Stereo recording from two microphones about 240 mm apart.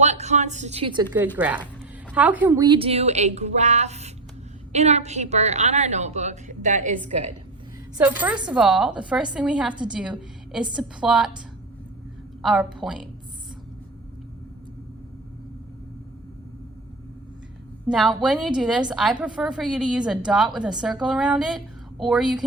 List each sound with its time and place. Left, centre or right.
0.0 s a woman's voice: right
1.4 s a woman's voice: centre
2.6 s a woman's voice: right
7.9 s a woman's voice: centre
17.9 s a woman's voice: centre